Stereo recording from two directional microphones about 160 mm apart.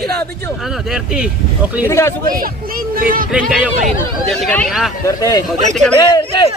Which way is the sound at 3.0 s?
60° right (ahead or behind).